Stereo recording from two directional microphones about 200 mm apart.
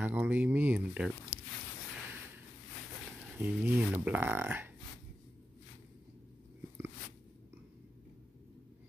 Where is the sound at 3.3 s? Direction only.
10° right (ahead or behind).